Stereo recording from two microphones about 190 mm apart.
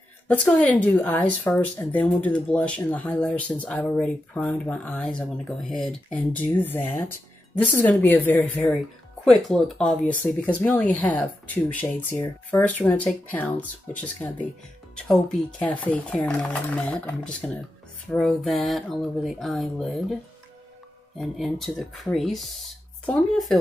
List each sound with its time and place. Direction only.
0.3 s speech: 5° left (ahead or behind)
21.2 s speech: centre (ahead or behind)